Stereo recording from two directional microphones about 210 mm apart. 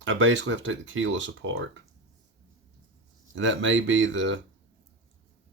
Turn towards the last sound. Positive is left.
turn(degrees=-60)  # may be behind; listen again after turning